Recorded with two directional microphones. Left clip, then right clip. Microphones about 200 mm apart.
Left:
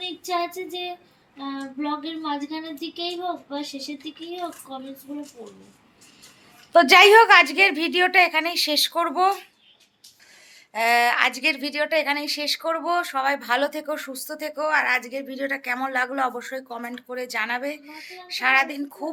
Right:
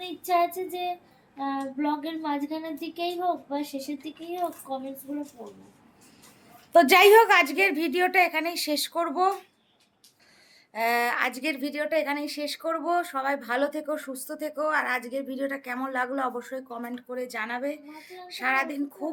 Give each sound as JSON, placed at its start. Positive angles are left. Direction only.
{"t": 0.3, "sound": "a woman's voice", "side_deg": -15}
{"t": 3.6, "sound": "speech", "side_deg": -35}
{"t": 3.8, "sound": "a woman's voice", "side_deg": -10}
{"t": 6.7, "sound": "a woman's voice", "side_deg": -5}
{"t": 10.7, "sound": "a woman's voice", "side_deg": -5}